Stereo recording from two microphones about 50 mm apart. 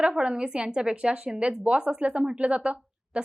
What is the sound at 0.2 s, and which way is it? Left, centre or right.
A woman's voice, right.